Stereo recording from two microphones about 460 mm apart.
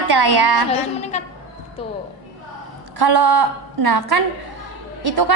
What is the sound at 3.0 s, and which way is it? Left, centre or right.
A woman's voice, right.